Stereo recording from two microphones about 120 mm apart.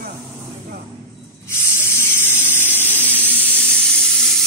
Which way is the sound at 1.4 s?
20° left (ahead or behind).